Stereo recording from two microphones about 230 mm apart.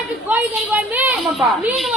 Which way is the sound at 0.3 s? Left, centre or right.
Centre.